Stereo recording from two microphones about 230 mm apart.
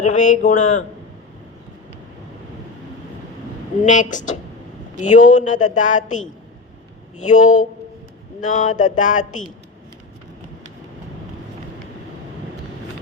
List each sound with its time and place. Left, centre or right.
0.0 s speech: left
3.8 s speech: left